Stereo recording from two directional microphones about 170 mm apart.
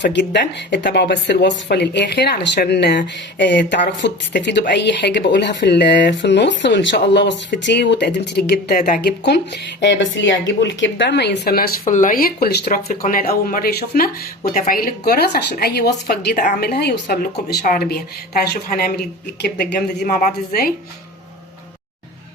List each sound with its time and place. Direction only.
0.0 s speech: 90° left; by 15.9 s 70° left (ahead or behind)
16.0 s a woman's voice: 60° left (ahead or behind); by 17.6 s 75° left (ahead or behind)
17.7 s speech: 65° left (ahead or behind)